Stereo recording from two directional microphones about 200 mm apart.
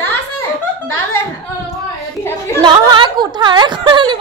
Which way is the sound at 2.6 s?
25° right (ahead or behind).